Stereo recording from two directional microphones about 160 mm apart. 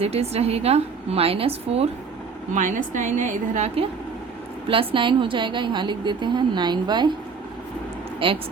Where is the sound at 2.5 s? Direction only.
50° right (ahead or behind).